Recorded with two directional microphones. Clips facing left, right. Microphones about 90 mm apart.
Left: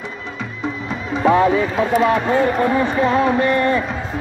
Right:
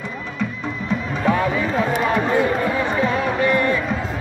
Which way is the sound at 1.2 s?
30° left (ahead or behind).